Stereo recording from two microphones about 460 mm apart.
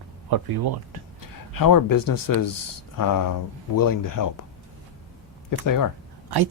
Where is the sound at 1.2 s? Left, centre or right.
Left.